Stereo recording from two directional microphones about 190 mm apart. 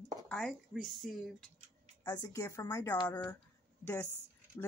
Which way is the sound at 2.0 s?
20° left (ahead or behind).